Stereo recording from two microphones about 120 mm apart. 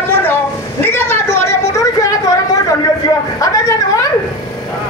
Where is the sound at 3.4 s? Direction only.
30° left (ahead or behind).